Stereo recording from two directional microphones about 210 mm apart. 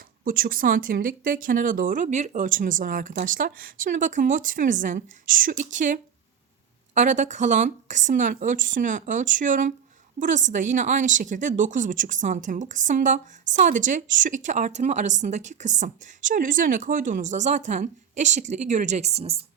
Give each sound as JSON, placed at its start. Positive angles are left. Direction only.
{"t": 0.3, "sound": "a woman's voice", "side_deg": -45}